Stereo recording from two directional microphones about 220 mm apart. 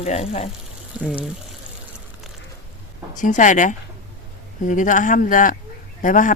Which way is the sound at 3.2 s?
35° left (ahead or behind).